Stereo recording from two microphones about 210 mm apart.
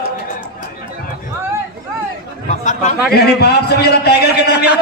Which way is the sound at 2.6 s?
35° left (ahead or behind).